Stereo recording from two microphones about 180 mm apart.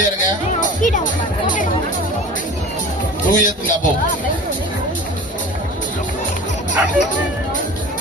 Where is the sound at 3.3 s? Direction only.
45° left (ahead or behind).